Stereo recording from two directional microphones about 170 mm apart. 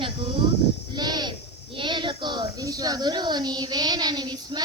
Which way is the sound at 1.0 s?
25° right (ahead or behind).